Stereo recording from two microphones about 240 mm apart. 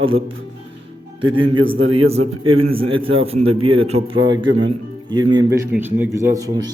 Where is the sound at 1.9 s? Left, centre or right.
Right.